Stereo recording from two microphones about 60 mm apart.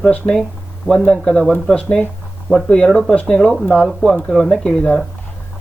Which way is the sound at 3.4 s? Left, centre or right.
Centre.